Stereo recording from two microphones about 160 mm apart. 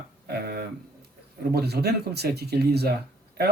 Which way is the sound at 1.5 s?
90° right.